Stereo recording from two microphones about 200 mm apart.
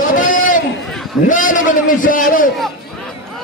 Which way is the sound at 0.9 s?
Centre (ahead or behind).